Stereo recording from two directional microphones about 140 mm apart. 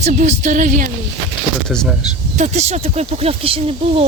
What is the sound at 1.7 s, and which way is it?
Speech, 5° left (ahead or behind).